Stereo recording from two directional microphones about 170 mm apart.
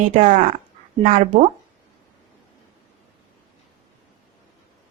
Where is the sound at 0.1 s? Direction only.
50° right (ahead or behind).